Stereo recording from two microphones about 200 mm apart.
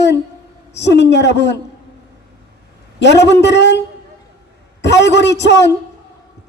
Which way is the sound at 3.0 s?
60° left (ahead or behind).